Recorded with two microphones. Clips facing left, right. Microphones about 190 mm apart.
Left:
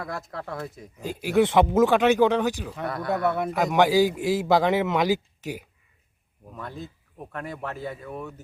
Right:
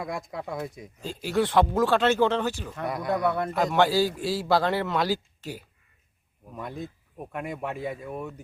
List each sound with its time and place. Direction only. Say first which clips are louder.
0.0 s speech: right 1 dB; 15° right (ahead or behind)
1.2 s speech: left 3 dB; 15° left (ahead or behind)
3.1 s speech: left 1 dB; 5° left (ahead or behind)
6.7 s speech: right 3 dB; centre (ahead or behind)